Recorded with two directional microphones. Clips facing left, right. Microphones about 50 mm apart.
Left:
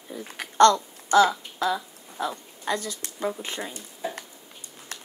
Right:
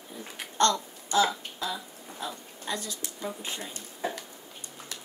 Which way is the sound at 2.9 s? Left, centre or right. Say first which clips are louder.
Left 6 dB; left.